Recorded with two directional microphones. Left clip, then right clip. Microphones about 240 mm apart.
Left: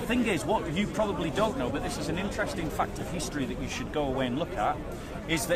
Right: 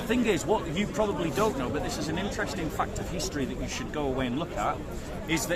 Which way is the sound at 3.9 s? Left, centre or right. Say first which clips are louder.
Left 1 dB; centre.